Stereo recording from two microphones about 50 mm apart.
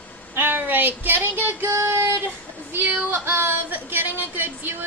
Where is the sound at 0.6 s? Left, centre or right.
Right.